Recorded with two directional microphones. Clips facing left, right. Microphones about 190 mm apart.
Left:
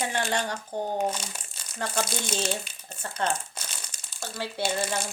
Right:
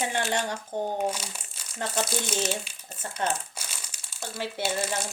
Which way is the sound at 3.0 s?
15° right (ahead or behind).